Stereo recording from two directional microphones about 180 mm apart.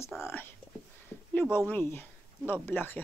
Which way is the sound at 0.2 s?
10° left (ahead or behind).